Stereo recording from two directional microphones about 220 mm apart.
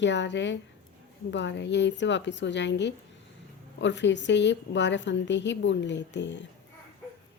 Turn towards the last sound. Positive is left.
turn(degrees=55)  # may be behind; listen again after turning